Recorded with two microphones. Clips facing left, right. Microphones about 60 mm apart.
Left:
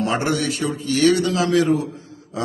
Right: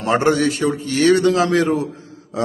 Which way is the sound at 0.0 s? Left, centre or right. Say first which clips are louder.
Right 5 dB; right.